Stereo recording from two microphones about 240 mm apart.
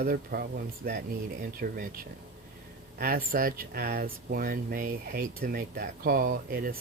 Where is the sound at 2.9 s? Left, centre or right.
Right.